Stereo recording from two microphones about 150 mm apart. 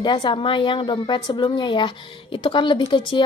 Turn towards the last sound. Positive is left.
turn(degrees=30)  # may be behind; listen again after turning